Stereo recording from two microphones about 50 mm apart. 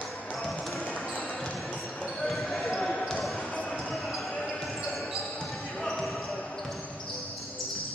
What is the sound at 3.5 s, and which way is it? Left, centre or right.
Basketball bounce, left.